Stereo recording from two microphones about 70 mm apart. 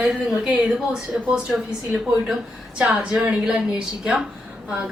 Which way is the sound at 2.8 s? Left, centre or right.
Centre.